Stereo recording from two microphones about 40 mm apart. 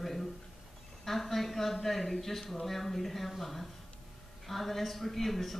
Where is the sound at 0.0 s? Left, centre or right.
Centre.